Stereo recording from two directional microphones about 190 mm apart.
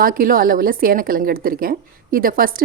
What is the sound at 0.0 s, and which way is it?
A woman's voice, 50° right (ahead or behind).